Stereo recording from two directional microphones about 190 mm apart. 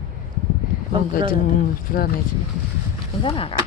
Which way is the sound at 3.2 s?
30° left (ahead or behind).